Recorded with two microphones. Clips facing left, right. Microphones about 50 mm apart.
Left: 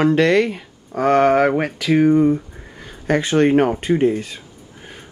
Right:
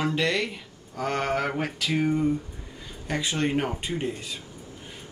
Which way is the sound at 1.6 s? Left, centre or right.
Left.